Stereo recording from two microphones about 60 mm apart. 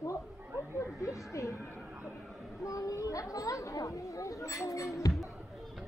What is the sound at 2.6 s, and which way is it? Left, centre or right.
Speech, left.